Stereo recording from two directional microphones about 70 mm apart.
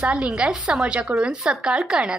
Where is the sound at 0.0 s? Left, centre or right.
Centre.